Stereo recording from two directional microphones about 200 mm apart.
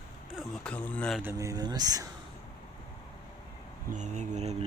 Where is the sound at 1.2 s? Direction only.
15° right (ahead or behind).